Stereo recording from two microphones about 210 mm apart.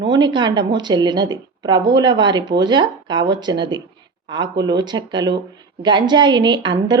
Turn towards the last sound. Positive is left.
turn(degrees=-20)  # may be behind; listen again after turning